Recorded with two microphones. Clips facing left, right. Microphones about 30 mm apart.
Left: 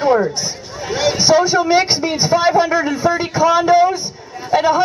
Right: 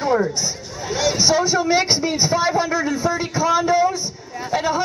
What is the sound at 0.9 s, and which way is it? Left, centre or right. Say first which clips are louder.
A man's voice: left 5 dB; left.